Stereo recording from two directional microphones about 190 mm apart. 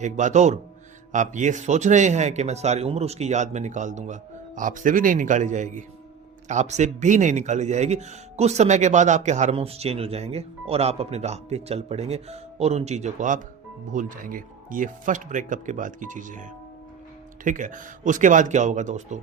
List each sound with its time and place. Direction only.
0.0 s speech: 40° right (ahead or behind)